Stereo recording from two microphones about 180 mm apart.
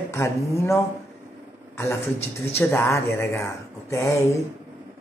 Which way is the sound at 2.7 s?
15° left (ahead or behind).